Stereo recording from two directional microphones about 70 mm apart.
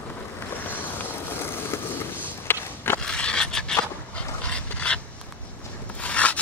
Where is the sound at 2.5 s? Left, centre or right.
Left.